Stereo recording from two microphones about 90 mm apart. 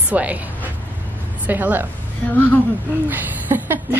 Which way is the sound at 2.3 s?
20° left (ahead or behind).